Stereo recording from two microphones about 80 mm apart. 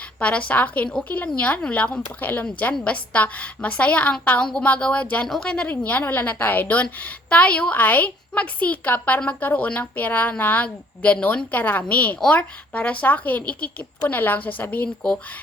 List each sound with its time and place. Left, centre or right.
0.2 s a woman's voice: centre